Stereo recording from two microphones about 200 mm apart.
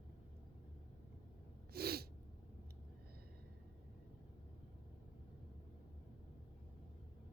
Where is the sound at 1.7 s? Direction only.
50° right (ahead or behind).